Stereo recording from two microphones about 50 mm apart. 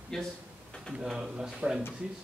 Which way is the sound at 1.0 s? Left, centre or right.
Centre.